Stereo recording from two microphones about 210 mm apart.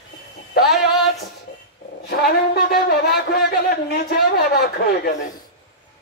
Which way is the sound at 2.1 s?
50° left (ahead or behind).